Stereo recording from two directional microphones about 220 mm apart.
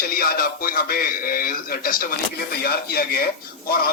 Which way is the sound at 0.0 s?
40° left (ahead or behind).